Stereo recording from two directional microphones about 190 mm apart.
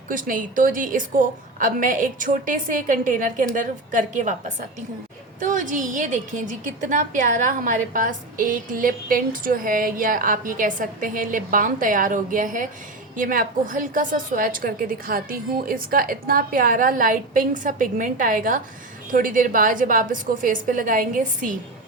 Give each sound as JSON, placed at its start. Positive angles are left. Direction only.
{"t": 0.1, "sound": "a woman's voice", "side_deg": -45}